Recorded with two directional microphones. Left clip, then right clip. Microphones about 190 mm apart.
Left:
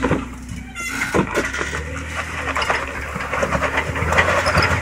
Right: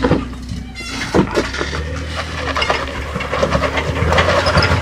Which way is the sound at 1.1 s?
15° left (ahead or behind).